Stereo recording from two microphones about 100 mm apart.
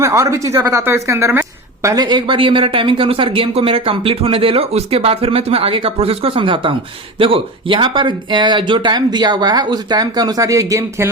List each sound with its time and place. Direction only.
0.0 s a woman's voice: 30° right (ahead or behind)
2.0 s speech: 55° right (ahead or behind); by 11.1 s 30° right (ahead or behind)